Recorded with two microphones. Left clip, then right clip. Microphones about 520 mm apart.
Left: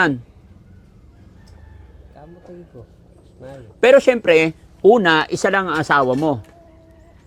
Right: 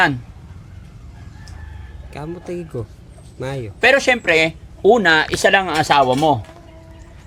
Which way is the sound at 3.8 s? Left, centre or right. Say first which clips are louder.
Left 2 dB; centre.